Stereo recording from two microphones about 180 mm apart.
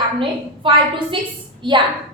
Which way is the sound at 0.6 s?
30° right (ahead or behind).